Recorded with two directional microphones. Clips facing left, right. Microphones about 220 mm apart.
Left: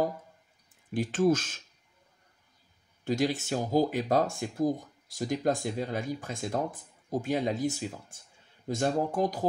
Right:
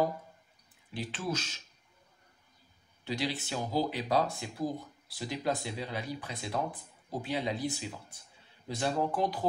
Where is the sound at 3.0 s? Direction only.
45° left (ahead or behind).